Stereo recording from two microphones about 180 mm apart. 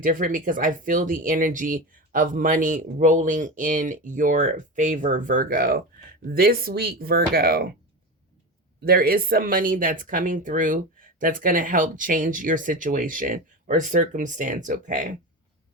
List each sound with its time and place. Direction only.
0.0 s speech: 50° right (ahead or behind)
8.8 s speech: 55° right (ahead or behind)